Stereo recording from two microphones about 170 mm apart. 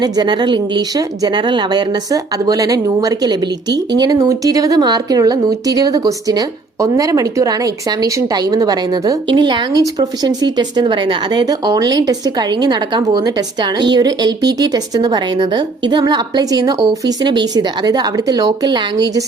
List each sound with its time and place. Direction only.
0.0 s a woman's voice: 25° right (ahead or behind)